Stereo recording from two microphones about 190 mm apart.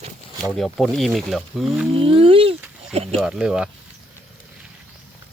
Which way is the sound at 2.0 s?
30° right (ahead or behind).